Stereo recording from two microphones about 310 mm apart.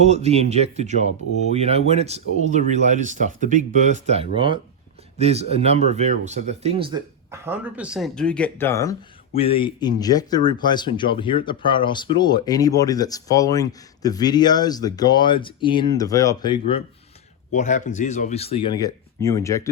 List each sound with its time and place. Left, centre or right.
0.0 s speech: right; by 19.7 s centre